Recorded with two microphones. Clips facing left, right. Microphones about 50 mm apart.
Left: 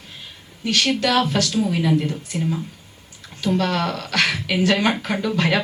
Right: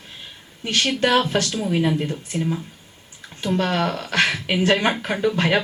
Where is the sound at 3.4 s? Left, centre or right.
Right.